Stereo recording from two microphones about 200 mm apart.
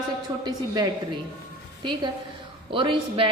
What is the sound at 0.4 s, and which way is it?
A woman's voice, 20° right (ahead or behind).